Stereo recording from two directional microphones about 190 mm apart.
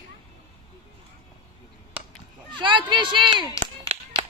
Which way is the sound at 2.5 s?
25° right (ahead or behind).